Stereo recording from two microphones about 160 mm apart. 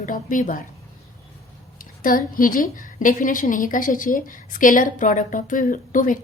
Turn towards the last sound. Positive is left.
turn(degrees=55)  # may be behind; listen again after turning